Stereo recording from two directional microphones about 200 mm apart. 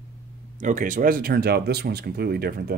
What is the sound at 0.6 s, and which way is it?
Speech, 40° right (ahead or behind).